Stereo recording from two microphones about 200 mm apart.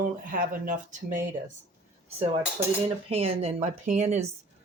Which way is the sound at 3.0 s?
30° right (ahead or behind).